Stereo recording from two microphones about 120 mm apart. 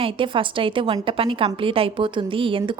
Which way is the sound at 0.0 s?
45° right (ahead or behind).